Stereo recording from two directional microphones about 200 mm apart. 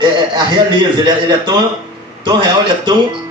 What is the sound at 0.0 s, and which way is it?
A man's voice, 25° right (ahead or behind).